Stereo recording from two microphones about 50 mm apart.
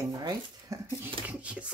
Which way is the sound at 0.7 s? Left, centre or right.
Right.